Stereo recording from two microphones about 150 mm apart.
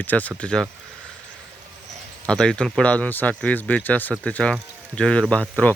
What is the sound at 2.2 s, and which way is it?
Speech, 5° left (ahead or behind).